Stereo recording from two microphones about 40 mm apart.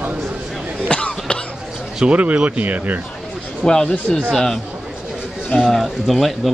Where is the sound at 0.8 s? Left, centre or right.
Left.